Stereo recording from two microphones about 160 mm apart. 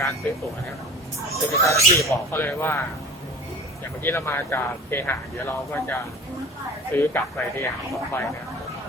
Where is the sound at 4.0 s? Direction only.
15° left (ahead or behind).